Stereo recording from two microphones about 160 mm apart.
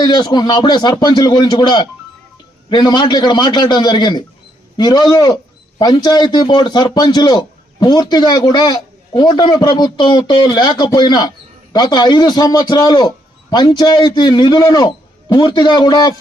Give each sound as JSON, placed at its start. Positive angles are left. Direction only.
{"t": 0.0, "sound": "a man's voice", "side_deg": 25}